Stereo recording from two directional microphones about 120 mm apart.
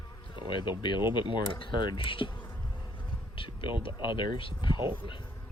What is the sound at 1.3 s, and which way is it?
Speech, 45° left (ahead or behind).